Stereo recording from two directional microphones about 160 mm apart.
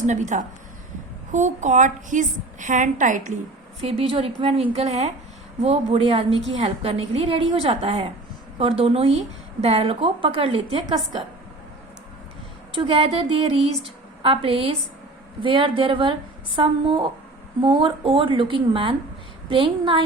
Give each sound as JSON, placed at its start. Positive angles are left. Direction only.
{"t": 0.0, "sound": "a woman's voice", "side_deg": -50}
{"t": 3.8, "sound": "a woman's voice", "side_deg": -35}
{"t": 12.7, "sound": "a woman's voice", "side_deg": -35}